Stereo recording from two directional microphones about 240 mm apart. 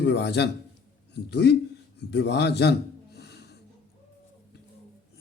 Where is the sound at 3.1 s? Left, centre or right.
Left.